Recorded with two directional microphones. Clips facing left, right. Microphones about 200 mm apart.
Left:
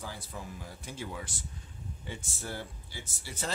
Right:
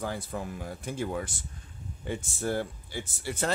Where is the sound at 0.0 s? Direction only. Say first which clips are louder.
Right 8 dB; 55° right (ahead or behind).